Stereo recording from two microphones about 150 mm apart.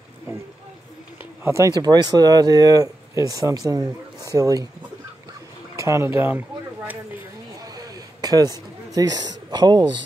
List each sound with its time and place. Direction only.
1.4 s speech: 20° right (ahead or behind)
5.8 s speech: 20° right (ahead or behind)
7.6 s a sound: 25° right (ahead or behind)